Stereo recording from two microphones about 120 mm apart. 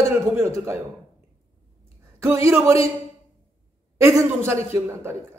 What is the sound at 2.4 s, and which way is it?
Speech, 20° right (ahead or behind).